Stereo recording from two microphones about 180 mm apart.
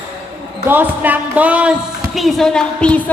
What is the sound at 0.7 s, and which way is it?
A woman's voice, 10° right (ahead or behind).